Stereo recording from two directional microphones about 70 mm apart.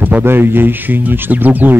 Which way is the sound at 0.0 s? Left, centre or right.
Right.